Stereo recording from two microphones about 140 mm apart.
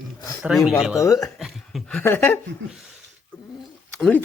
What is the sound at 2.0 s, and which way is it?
Speech, 15° left (ahead or behind).